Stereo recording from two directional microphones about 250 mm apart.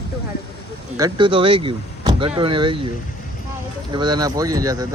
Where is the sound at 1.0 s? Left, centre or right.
Centre.